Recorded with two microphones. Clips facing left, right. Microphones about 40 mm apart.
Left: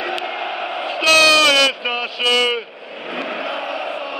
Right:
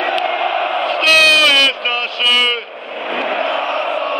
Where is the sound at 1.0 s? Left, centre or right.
Centre.